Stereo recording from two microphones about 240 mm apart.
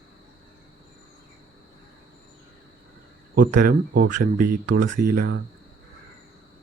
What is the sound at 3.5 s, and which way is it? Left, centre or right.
Speech, right.